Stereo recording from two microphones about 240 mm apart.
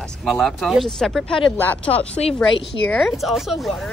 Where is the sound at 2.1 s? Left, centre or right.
Left.